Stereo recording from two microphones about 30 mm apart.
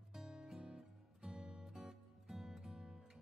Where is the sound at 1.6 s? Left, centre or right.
Centre.